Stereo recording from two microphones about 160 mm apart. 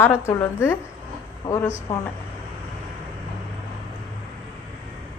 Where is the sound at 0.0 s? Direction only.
15° left (ahead or behind).